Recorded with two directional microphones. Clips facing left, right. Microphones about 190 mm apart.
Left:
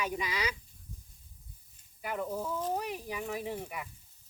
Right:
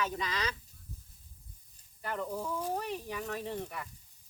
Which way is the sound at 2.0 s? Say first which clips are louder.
Left 1 dB; 10° left (ahead or behind).